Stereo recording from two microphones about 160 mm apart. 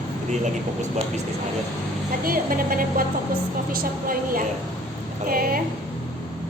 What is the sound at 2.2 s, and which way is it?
A woman's voice, 65° right (ahead or behind).